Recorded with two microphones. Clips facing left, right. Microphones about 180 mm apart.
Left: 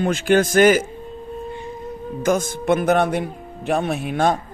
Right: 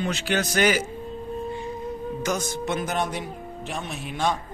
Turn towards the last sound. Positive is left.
turn(degrees=55)  # may be behind; listen again after turning